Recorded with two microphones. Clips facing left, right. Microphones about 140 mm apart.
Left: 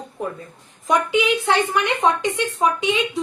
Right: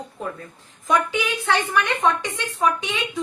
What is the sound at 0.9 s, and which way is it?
A woman's voice, 20° left (ahead or behind).